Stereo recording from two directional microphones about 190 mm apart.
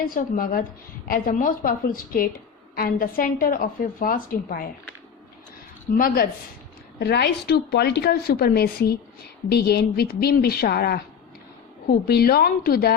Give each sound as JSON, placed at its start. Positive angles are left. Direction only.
{"t": 0.0, "sound": "a woman's voice", "side_deg": 50}
{"t": 5.9, "sound": "a woman's voice", "side_deg": 50}
{"t": 7.0, "sound": "a woman's voice", "side_deg": 60}